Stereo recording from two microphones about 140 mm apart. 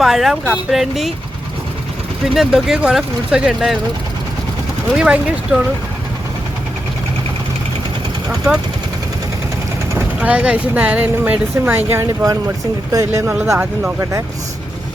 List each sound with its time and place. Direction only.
0.0 s speech: centre (ahead or behind)
2.2 s speech: centre (ahead or behind)
4.9 s speech: 5° right (ahead or behind)
10.2 s speech: 10° right (ahead or behind)